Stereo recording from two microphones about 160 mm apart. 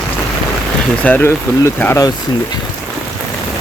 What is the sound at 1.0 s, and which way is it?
Speech, 10° left (ahead or behind).